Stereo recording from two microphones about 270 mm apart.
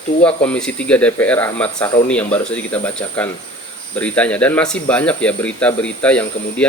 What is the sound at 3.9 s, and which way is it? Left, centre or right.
Speech, centre.